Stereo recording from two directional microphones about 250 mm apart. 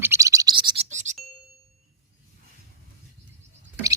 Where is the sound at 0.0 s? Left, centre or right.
Centre; by 1.1 s right.